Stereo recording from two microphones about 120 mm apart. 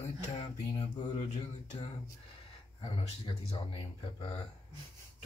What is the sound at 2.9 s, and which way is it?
Speech, 45° left (ahead or behind).